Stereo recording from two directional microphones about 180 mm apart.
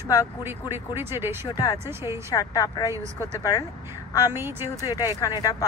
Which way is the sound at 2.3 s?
20° left (ahead or behind).